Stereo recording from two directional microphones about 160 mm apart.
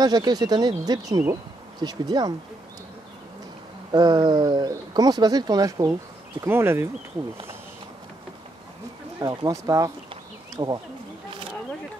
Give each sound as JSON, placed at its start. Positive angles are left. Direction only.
{"t": 0.0, "sound": "speech", "side_deg": -25}
{"t": 3.9, "sound": "speech", "side_deg": -25}
{"t": 9.2, "sound": "speech", "side_deg": -25}